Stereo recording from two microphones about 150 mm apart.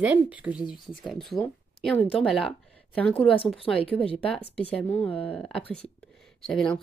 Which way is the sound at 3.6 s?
40° left (ahead or behind).